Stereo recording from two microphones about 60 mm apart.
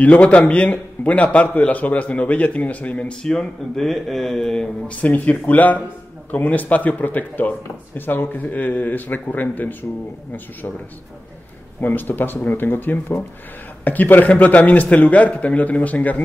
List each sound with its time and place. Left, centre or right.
0.0 s a man's voice: left; by 4.6 s centre
4.8 s a man's voice: left
11.8 s a man's voice: left